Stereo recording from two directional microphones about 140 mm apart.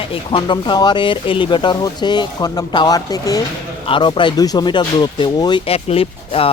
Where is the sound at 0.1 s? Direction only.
40° left (ahead or behind).